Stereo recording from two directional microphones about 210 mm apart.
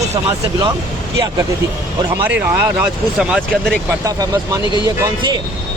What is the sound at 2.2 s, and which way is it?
Speech, 10° right (ahead or behind).